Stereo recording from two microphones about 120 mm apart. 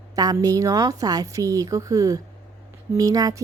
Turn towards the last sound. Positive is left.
turn(degrees=-30)  # may be behind; listen again after turning